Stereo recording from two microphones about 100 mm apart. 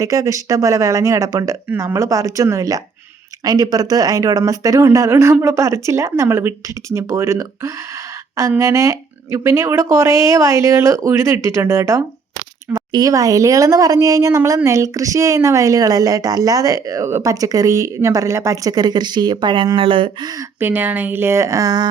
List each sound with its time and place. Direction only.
0.0 s speech: 35° right (ahead or behind)
12.9 s speech: 40° right (ahead or behind); by 20.1 s 60° right (ahead or behind)
20.6 s speech: 20° right (ahead or behind); by 21.8 s 40° right (ahead or behind)